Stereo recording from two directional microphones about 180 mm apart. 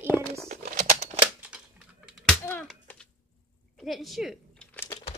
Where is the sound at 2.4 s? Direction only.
10° left (ahead or behind).